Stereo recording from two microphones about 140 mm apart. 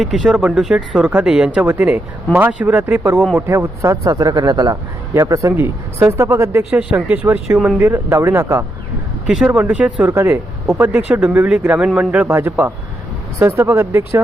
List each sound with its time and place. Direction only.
0.0 s a man's voice: centre (ahead or behind); by 8.6 s 20° right (ahead or behind)
9.2 s speech: 5° right (ahead or behind)